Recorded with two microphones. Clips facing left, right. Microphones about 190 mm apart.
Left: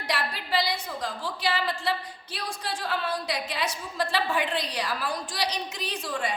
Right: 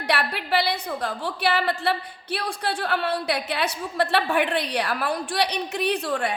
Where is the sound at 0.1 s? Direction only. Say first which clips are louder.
Right 5 dB; 65° right (ahead or behind).